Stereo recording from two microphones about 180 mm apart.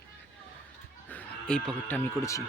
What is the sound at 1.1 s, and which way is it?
Speech, 5° left (ahead or behind).